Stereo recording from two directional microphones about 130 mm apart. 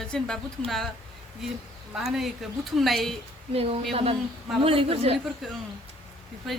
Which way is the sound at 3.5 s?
50° right (ahead or behind).